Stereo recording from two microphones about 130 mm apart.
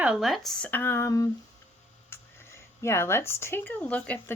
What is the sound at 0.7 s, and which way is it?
Speech, 15° left (ahead or behind).